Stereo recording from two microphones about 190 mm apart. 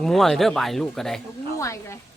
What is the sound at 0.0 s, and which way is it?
Speech, centre (ahead or behind).